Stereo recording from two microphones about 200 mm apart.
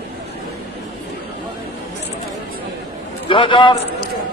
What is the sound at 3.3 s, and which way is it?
Speech, 25° left (ahead or behind).